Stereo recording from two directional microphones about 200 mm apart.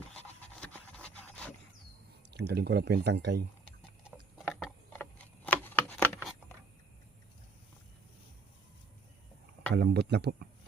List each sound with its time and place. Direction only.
0.6 s wood: 5° left (ahead or behind)
2.3 s speech: 55° right (ahead or behind)
4.6 s a sound: 5° left (ahead or behind)
9.7 s speech: 55° right (ahead or behind)